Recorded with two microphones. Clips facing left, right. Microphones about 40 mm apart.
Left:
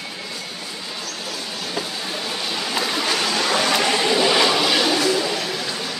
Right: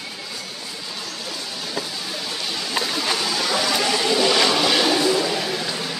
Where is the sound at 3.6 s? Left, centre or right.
Left.